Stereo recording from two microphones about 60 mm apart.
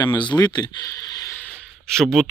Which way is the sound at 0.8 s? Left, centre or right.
Left.